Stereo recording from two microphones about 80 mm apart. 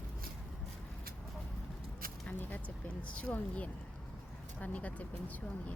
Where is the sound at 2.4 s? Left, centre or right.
Centre.